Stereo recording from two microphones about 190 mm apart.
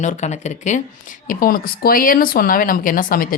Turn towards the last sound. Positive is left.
turn(degrees=45)  # may be behind; listen again after turning